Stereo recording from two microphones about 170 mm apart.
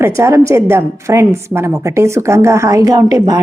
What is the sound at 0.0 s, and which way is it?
A woman's voice, 15° right (ahead or behind).